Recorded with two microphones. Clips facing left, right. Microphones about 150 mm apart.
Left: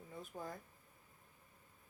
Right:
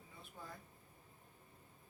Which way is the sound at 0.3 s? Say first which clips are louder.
Left 7 dB; 35° left (ahead or behind).